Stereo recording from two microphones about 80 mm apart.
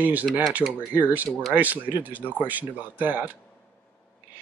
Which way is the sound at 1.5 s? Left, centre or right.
Right.